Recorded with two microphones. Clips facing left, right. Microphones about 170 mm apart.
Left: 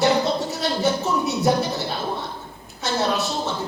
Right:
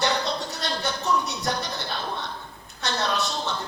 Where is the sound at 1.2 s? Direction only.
5° left (ahead or behind).